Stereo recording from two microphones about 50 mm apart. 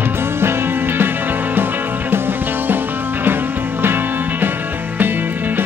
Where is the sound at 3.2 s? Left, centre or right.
Right.